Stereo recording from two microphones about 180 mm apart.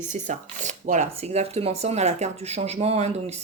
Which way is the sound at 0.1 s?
45° right (ahead or behind).